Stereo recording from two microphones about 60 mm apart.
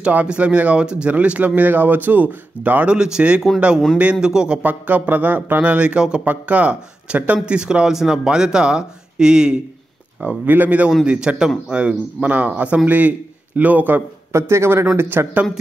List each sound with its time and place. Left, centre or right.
0.0 s speech: right
3.0 s speech: centre
4.6 s speech: right
10.2 s speech: right
11.1 s speech: centre; by 14.0 s right
14.3 s a man's voice: right